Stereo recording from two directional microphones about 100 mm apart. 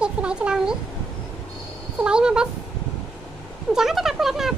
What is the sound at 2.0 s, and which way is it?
Speech, 10° right (ahead or behind).